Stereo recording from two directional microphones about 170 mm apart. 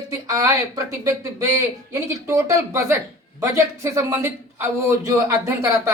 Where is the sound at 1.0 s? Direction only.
15° right (ahead or behind).